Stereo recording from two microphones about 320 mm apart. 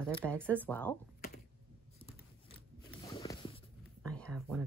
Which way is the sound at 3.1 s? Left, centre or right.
Centre.